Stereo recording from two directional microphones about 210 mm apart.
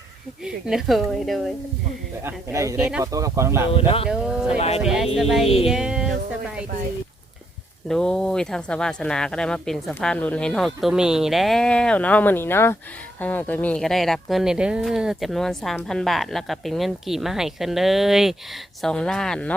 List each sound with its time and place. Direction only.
0.4 s a woman's voice: centre (ahead or behind)
2.2 s speech: 15° right (ahead or behind)
3.7 s speech: 25° left (ahead or behind)
4.1 s a woman's voice: 5° right (ahead or behind)
7.9 s a woman's voice: 5° left (ahead or behind)